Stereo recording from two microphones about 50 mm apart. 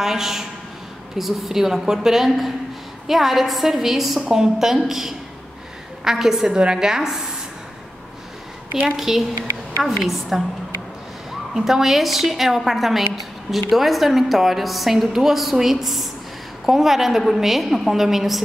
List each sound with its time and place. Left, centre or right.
0.0 s a woman's voice: centre
8.9 s a woman's voice: centre
11.5 s a woman's voice: centre